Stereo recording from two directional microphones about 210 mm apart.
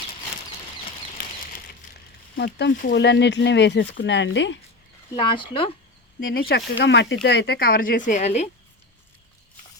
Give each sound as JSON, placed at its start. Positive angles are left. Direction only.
{"t": 2.3, "sound": "speech", "side_deg": 55}
{"t": 5.1, "sound": "speech", "side_deg": 25}
{"t": 6.3, "sound": "speech", "side_deg": 45}